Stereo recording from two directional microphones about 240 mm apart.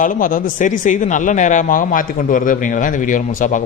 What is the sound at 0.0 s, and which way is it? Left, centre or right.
Speech, left.